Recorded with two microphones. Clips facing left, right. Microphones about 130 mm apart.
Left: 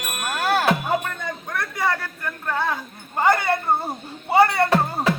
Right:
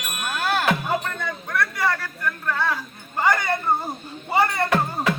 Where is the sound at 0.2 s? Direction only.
40° left (ahead or behind).